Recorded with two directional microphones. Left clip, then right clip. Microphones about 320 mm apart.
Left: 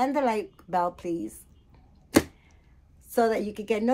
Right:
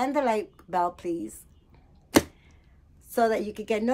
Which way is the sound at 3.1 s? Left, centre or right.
Centre.